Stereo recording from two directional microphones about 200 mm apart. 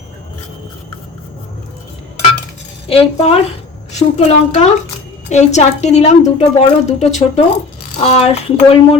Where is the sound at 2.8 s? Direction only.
30° left (ahead or behind).